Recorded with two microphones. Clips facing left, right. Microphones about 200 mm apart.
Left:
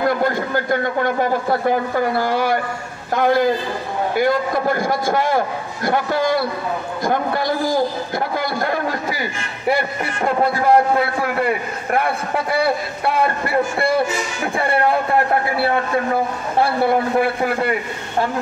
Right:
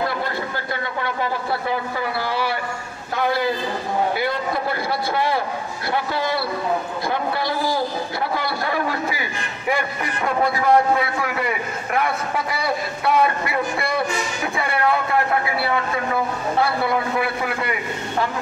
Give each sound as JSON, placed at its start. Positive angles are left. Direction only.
{"t": 0.1, "sound": "a man's voice", "side_deg": 45}
{"t": 16.6, "sound": "a man's voice", "side_deg": 50}